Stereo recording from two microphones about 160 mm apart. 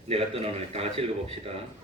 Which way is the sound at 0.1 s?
40° right (ahead or behind).